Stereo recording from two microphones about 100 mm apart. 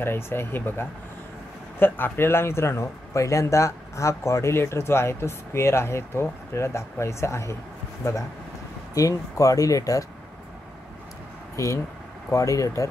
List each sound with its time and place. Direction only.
0.0 s a man's voice: 25° left (ahead or behind)
11.5 s speech: 30° left (ahead or behind)